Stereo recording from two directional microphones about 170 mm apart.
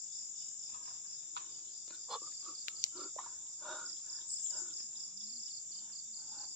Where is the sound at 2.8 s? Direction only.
50° left (ahead or behind).